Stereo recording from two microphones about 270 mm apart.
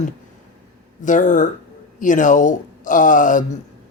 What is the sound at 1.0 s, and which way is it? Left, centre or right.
Speech, left.